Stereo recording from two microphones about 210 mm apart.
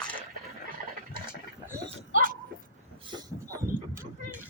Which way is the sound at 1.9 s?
40° right (ahead or behind).